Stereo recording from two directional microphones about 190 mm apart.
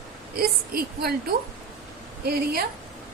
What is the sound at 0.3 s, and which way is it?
Speech, 50° right (ahead or behind).